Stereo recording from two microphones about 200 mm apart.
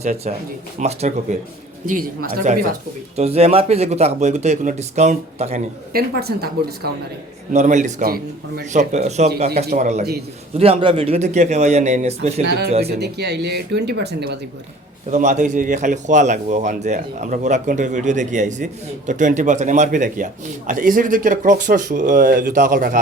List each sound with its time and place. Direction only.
0.0 s speech: 35° right (ahead or behind)
1.9 s speech: 45° right (ahead or behind)
3.2 s speech: 30° right (ahead or behind)
5.9 s speech: 50° right (ahead or behind)
7.5 s speech: 35° right (ahead or behind)
10.6 s speech: 25° right (ahead or behind)
12.5 s speech: 55° right (ahead or behind)
15.1 s speech: 35° right (ahead or behind)